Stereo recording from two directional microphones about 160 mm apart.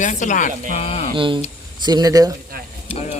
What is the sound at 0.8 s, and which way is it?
Speech, 40° left (ahead or behind).